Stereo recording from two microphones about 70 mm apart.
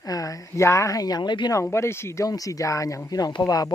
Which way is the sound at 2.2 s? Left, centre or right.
Left.